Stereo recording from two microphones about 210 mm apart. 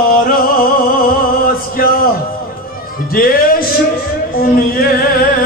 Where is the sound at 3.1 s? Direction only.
45° left (ahead or behind).